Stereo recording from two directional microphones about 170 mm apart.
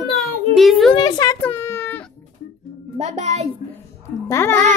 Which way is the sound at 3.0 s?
40° right (ahead or behind).